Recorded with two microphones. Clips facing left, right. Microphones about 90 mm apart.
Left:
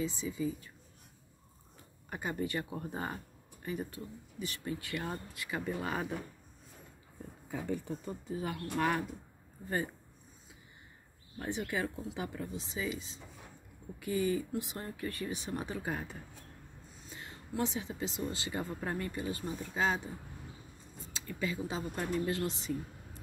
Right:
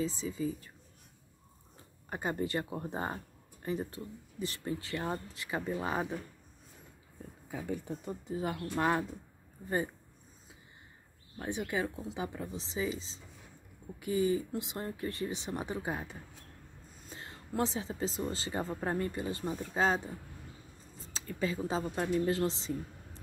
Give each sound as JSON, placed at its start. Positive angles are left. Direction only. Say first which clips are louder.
{"t": 0.0, "sound": "speech", "louder": "right 1 dB", "side_deg": -30}
{"t": 2.0, "sound": "speech", "louder": "right 2 dB", "side_deg": -30}
{"t": 7.5, "sound": "speech", "louder": "left 1 dB", "side_deg": -10}
{"t": 11.3, "sound": "speech", "louder": "right 1 dB", "side_deg": -15}
{"t": 17.0, "sound": "speech", "louder": "right 1 dB", "side_deg": -35}
{"t": 21.0, "sound": "speech", "louder": "right 3 dB", "side_deg": -35}